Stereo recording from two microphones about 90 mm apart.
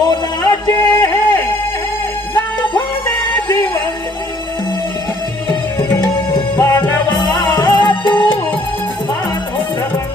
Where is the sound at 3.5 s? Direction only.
55° left (ahead or behind).